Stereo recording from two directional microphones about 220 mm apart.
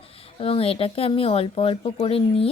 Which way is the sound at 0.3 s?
25° left (ahead or behind).